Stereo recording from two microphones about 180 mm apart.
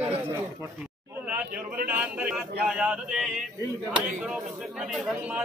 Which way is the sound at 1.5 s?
55° right (ahead or behind).